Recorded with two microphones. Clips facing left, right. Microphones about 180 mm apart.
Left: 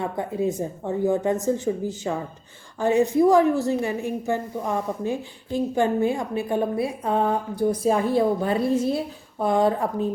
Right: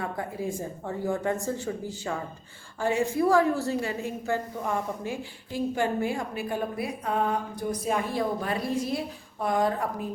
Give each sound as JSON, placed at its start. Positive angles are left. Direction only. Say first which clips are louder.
{"t": 0.0, "sound": "a woman's voice", "louder": "left 7 dB", "side_deg": 25}